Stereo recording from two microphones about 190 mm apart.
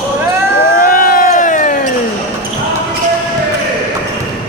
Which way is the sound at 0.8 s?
50° left (ahead or behind).